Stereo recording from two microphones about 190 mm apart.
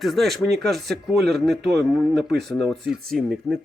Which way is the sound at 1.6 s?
60° right (ahead or behind).